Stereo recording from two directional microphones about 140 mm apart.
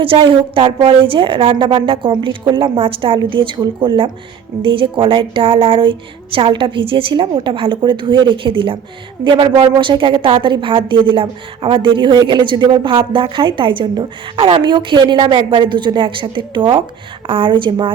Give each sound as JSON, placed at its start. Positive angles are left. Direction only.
{"t": 0.0, "sound": "a woman's voice", "side_deg": -40}